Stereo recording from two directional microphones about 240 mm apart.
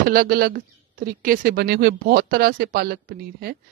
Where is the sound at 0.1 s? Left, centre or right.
Right.